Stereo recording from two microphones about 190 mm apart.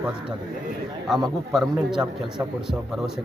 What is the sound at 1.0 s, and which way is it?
Speech, centre (ahead or behind).